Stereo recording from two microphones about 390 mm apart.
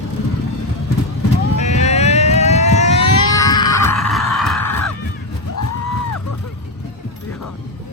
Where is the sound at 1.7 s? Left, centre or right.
Centre.